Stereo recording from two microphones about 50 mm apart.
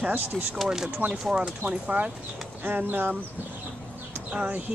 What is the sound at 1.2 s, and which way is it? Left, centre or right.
Speech, centre.